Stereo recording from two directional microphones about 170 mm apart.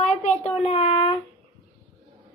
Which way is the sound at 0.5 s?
40° left (ahead or behind).